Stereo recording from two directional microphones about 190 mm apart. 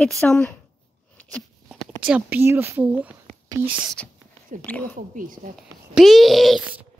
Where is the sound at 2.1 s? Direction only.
10° right (ahead or behind).